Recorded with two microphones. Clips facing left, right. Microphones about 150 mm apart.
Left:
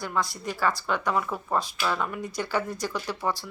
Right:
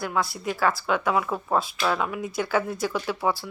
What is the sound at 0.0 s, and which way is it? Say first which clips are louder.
Speech: right 3 dB; 10° right (ahead or behind).